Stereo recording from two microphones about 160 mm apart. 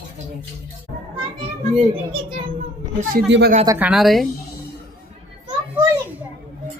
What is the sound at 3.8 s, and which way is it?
Speech, 5° right (ahead or behind).